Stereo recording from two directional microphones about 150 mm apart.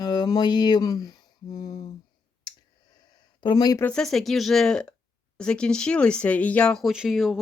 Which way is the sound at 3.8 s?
5° left (ahead or behind).